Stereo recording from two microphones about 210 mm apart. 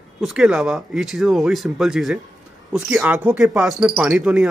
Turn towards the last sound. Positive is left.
turn(degrees=-5)  # may be behind; listen again after turning